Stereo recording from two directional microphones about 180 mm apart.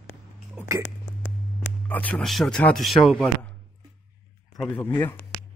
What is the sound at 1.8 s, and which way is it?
Speech, 10° left (ahead or behind).